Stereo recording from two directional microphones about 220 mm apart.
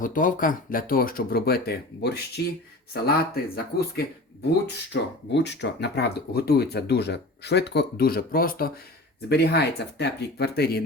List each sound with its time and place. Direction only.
0.0 s speech: 35° left (ahead or behind)